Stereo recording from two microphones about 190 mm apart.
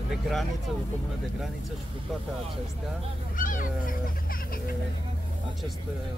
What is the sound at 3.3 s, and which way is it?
Goose, 45° left (ahead or behind).